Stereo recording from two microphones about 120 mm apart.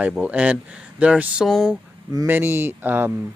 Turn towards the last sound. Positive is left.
turn(degrees=-15)  # may be behind; listen again after turning